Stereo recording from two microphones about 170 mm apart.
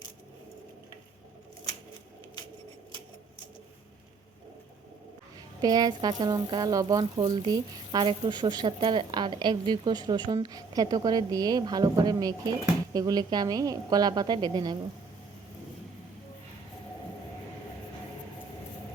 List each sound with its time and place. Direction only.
5.6 s a woman's voice: 20° right (ahead or behind)